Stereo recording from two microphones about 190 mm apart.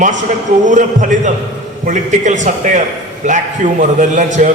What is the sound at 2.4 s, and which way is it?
A man's voice, 40° right (ahead or behind).